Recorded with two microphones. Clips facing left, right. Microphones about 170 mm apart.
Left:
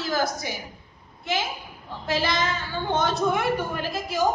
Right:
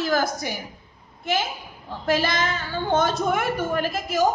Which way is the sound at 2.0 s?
50° right (ahead or behind).